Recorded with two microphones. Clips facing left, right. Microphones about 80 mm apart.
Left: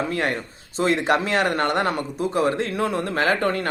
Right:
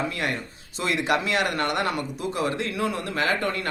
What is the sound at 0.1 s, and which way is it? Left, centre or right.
Speech, left.